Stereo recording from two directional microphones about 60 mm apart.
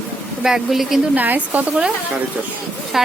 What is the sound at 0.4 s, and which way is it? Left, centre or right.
Speech, centre.